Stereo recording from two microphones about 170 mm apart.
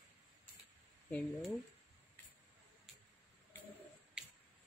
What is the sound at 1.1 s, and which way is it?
Speech, 5° left (ahead or behind).